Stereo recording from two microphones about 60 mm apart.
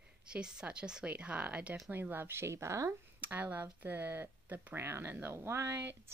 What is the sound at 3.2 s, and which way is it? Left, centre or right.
Speech, right.